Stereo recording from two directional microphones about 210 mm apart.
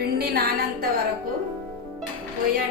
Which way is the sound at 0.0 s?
50° right (ahead or behind).